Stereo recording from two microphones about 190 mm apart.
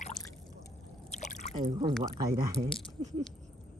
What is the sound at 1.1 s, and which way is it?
Drip, 40° left (ahead or behind).